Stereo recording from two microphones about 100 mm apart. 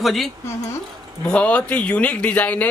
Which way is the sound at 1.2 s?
10° left (ahead or behind).